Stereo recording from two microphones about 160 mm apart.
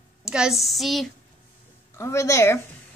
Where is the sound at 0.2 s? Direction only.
5° right (ahead or behind).